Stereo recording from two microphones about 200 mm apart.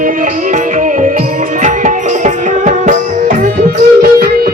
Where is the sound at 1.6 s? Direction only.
40° right (ahead or behind).